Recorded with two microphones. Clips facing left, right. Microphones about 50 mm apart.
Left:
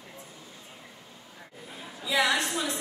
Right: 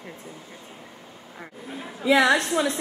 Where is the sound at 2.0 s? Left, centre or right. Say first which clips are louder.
Right 7 dB; right.